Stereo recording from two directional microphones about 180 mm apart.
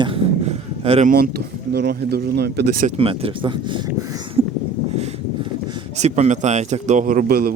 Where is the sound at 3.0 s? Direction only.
30° right (ahead or behind).